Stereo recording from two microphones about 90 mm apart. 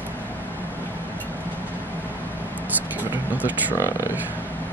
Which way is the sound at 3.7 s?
35° left (ahead or behind).